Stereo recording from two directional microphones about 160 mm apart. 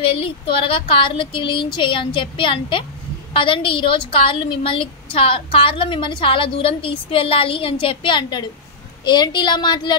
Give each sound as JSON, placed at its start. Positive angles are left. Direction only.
{"t": 0.1, "sound": "a woman's voice", "side_deg": 35}